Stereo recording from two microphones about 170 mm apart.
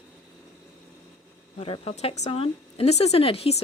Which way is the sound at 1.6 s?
35° left (ahead or behind).